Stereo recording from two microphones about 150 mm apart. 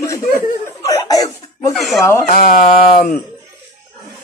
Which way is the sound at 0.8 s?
25° left (ahead or behind).